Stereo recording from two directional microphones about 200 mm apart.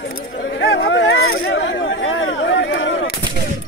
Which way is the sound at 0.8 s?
70° left (ahead or behind).